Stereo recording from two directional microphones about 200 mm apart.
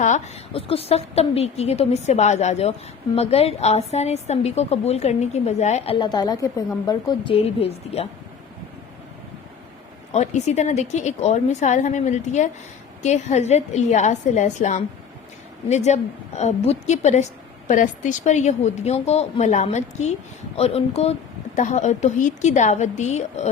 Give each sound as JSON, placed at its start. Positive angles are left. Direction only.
{"t": 0.0, "sound": "a woman's voice", "side_deg": 35}
{"t": 10.1, "sound": "a woman's voice", "side_deg": 35}